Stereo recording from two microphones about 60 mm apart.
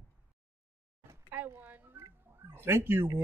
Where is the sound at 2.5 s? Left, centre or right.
Right.